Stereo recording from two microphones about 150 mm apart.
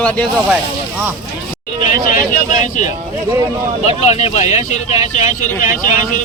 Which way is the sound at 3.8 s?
45° left (ahead or behind).